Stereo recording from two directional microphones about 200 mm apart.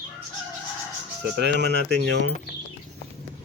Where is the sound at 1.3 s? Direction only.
55° right (ahead or behind).